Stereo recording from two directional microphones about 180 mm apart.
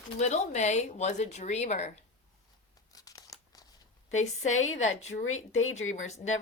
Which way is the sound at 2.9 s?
20° left (ahead or behind).